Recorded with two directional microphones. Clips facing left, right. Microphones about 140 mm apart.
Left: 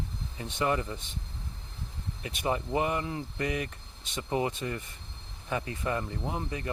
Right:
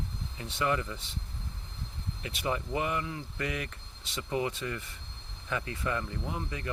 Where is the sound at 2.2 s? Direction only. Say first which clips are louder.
Left 2 dB; 25° left (ahead or behind).